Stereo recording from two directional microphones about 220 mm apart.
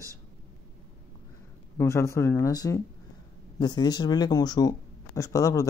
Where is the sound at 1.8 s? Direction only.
10° left (ahead or behind).